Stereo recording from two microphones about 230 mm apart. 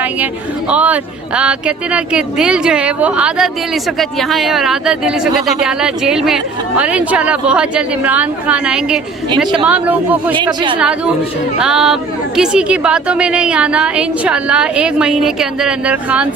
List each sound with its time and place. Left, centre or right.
0.7 s speech: centre
10.3 s speech: centre
10.8 s speech: centre